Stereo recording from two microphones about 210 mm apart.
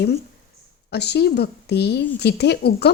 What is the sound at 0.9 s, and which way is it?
Speech, 50° left (ahead or behind).